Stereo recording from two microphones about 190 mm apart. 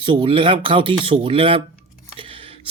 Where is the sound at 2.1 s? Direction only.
30° right (ahead or behind).